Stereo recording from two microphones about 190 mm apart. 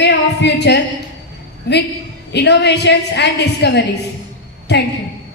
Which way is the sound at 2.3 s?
65° left (ahead or behind).